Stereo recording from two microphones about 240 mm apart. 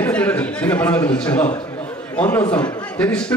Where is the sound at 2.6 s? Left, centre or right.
Centre.